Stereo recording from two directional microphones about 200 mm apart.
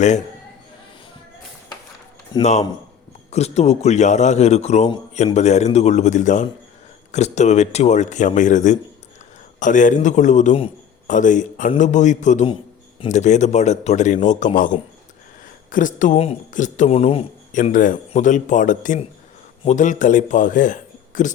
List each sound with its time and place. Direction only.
2.4 s a man's voice: 35° left (ahead or behind)
15.7 s a man's voice: 40° left (ahead or behind)